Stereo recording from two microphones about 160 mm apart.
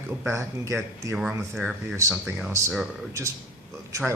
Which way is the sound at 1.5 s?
5° right (ahead or behind).